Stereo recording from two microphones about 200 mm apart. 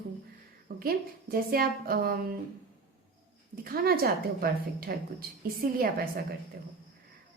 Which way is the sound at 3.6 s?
45° right (ahead or behind).